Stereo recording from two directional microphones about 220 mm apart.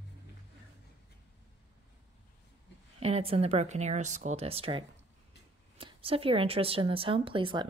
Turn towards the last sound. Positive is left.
turn(degrees=-20)  # may be behind; listen again after turning